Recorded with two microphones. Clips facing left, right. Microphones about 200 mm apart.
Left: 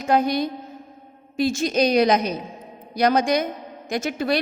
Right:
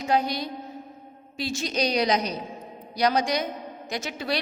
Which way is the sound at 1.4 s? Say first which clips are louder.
Left 7 dB; 50° left (ahead or behind).